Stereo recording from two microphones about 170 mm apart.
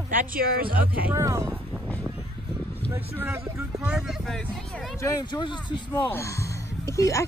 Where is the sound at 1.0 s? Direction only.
15° right (ahead or behind).